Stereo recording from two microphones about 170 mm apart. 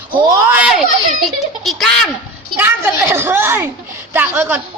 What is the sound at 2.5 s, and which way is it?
A man's voice, 15° right (ahead or behind).